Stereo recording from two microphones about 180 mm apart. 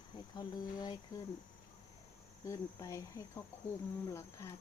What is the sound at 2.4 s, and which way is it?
Speech, 15° left (ahead or behind).